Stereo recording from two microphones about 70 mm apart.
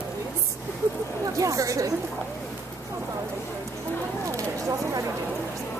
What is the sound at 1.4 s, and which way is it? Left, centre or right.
Speech, right.